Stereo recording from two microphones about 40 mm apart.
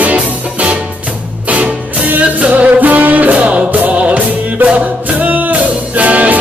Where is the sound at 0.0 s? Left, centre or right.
Right.